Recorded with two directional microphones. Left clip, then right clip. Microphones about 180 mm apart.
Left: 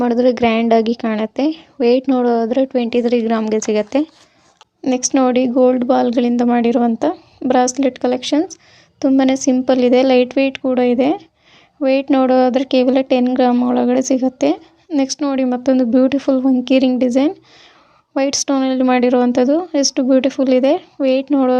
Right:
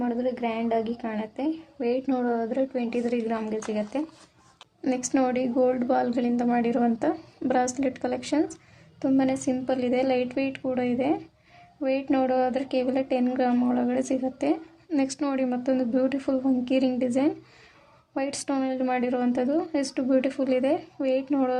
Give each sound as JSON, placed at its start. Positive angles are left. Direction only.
{"t": 0.0, "sound": "a woman's voice", "side_deg": 50}
{"t": 4.8, "sound": "a woman's voice", "side_deg": 35}